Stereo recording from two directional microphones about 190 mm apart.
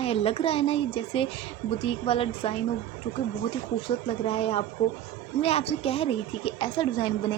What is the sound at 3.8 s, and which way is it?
A woman's voice, 30° left (ahead or behind).